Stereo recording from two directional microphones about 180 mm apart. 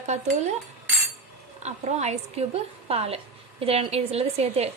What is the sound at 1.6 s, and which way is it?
A woman's voice, 40° right (ahead or behind).